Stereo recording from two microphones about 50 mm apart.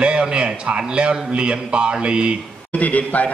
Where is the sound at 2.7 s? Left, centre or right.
Left.